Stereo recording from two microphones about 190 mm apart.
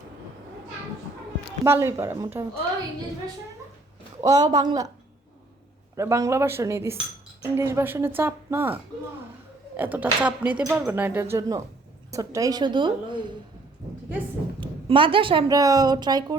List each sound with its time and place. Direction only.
1.6 s speech: 15° right (ahead or behind)
4.2 s a woman's voice: 20° right (ahead or behind)
6.0 s a woman's voice: 15° right (ahead or behind)
14.6 s a woman's voice: 25° right (ahead or behind)